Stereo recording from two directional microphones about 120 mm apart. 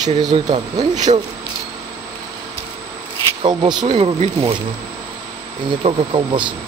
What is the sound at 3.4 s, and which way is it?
Speech, 40° right (ahead or behind).